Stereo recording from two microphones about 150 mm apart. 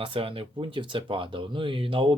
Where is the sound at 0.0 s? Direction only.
35° right (ahead or behind).